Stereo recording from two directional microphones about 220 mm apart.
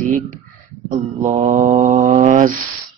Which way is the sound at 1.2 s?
30° right (ahead or behind).